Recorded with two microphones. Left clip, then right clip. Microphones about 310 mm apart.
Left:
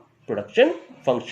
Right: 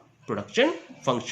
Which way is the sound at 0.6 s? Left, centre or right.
Centre.